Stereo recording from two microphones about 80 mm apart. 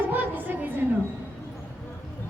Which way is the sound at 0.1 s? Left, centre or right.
Right.